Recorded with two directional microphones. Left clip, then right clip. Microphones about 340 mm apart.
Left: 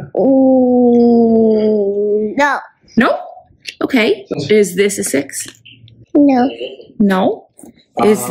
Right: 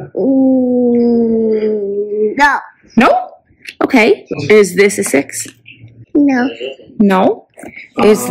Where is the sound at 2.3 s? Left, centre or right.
Centre.